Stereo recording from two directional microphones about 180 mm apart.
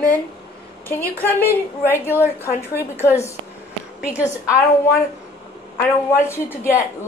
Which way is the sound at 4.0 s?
15° left (ahead or behind).